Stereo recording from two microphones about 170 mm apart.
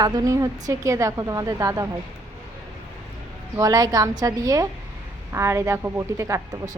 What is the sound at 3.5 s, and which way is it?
A woman's voice, 20° right (ahead or behind).